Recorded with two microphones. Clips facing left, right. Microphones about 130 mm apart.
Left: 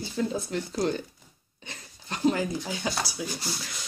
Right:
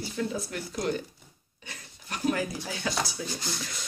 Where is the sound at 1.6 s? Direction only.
25° left (ahead or behind).